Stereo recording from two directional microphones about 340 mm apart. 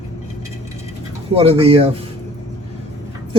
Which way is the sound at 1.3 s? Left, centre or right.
Centre.